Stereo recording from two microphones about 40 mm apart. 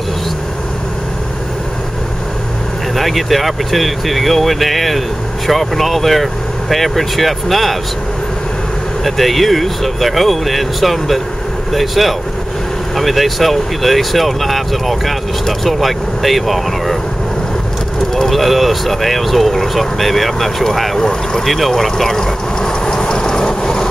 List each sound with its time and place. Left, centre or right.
3.0 s speech: centre
9.0 s speech: centre
18.1 s speech: centre
21.5 s vehicle: centre